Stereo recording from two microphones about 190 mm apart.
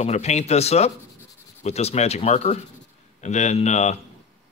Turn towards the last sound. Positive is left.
turn(degrees=35)  # may be behind; listen again after turning